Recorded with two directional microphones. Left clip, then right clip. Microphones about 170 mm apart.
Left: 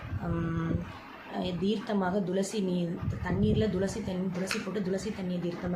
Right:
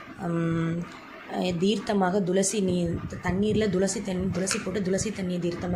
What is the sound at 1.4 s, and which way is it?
A woman's voice, 25° right (ahead or behind).